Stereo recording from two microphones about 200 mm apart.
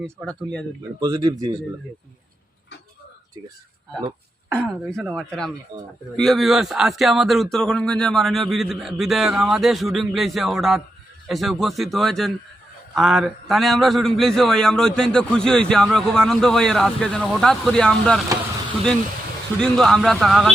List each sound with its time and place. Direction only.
0.9 s speech: 15° right (ahead or behind)
4.5 s speech: 5° left (ahead or behind)
19.6 s speech: centre (ahead or behind)